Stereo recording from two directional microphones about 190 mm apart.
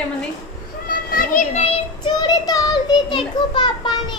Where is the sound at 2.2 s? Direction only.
20° left (ahead or behind).